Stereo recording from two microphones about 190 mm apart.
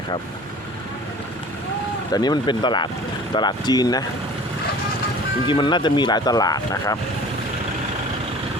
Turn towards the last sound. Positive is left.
turn(degrees=20)  # may be behind; listen again after turning